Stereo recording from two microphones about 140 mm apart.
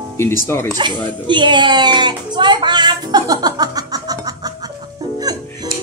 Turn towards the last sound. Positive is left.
turn(degrees=-25)  # may be behind; listen again after turning